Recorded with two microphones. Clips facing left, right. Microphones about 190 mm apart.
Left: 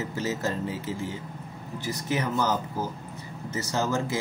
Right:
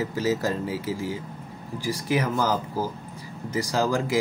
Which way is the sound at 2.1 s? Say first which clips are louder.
Right 2 dB; 10° right (ahead or behind).